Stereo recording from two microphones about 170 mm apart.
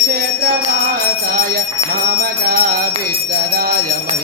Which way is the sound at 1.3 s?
65° right (ahead or behind).